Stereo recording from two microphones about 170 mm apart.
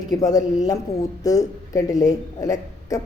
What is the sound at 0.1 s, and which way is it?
Speech, 20° left (ahead or behind).